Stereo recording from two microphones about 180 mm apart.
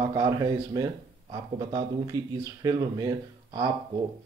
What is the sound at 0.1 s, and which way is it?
Speech, 20° right (ahead or behind).